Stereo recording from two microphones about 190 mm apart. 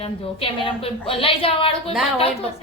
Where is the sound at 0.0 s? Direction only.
30° left (ahead or behind).